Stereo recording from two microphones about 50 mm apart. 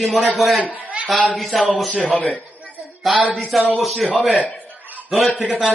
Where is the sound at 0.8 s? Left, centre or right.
Right.